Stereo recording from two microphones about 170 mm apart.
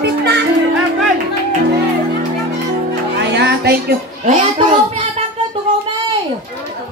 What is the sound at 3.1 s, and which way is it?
Music, 80° right.